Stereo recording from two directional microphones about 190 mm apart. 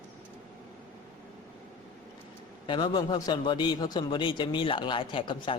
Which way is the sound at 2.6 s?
25° left (ahead or behind).